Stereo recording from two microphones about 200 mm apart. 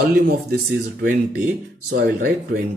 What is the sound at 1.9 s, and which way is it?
Speech, 50° right (ahead or behind).